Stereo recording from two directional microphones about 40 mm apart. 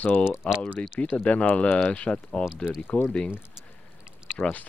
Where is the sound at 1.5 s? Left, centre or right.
Left.